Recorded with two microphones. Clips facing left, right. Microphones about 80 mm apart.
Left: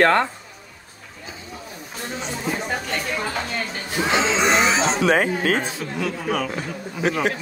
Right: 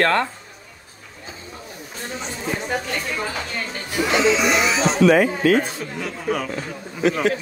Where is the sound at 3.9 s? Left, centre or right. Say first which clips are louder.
Right 2 dB; left.